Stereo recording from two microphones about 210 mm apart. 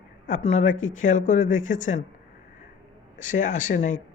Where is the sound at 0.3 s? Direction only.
35° left (ahead or behind).